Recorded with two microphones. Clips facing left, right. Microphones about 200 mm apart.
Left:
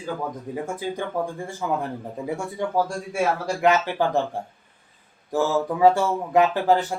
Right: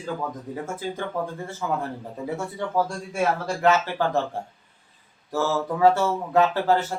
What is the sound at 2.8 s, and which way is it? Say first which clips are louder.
Speech: left 1 dB; 10° left (ahead or behind).